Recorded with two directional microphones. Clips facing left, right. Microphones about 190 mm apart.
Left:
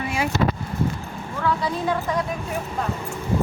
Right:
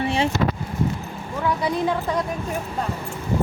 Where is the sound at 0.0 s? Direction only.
30° right (ahead or behind).